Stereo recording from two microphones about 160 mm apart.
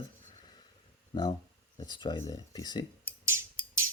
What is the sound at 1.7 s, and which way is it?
Speech, 25° left (ahead or behind).